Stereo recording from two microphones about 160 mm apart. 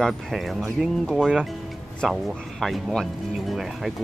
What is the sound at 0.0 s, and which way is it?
Speech, centre (ahead or behind).